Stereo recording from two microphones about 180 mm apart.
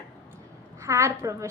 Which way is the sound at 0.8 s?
15° right (ahead or behind).